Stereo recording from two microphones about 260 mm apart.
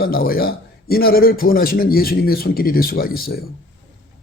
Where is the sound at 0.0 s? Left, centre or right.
Left.